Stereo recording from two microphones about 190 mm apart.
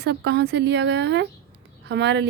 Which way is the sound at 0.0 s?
60° right (ahead or behind).